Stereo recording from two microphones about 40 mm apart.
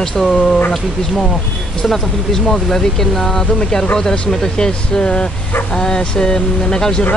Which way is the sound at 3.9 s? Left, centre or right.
Left.